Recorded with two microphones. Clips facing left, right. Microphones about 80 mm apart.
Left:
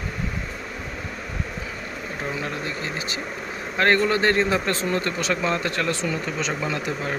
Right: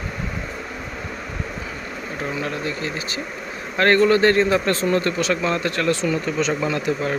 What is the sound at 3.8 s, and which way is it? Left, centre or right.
A man's voice, centre.